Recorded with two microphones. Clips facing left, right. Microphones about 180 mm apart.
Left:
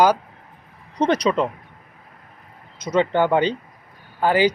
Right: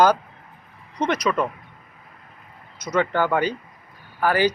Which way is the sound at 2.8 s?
25° left (ahead or behind).